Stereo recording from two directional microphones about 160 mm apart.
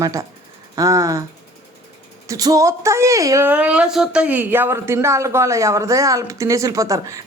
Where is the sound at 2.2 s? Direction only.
20° right (ahead or behind).